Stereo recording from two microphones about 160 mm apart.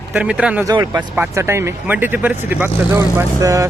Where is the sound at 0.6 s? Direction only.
25° right (ahead or behind).